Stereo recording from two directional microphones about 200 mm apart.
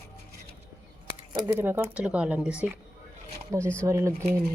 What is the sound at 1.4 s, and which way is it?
Speech, 10° right (ahead or behind).